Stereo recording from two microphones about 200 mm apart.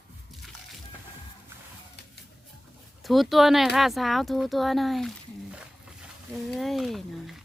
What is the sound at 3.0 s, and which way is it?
Speech, centre (ahead or behind).